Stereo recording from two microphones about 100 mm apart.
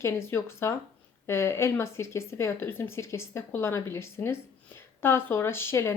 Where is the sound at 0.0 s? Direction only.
25° left (ahead or behind).